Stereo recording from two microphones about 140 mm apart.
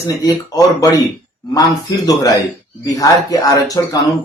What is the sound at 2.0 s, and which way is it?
Speech, 25° left (ahead or behind).